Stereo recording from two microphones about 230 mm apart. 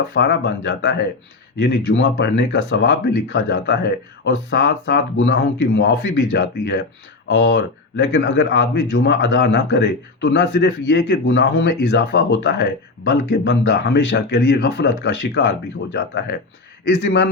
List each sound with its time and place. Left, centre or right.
0.1 s speech: left